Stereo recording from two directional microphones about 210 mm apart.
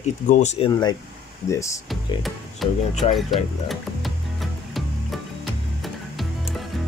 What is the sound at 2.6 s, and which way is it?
Speech, centre (ahead or behind).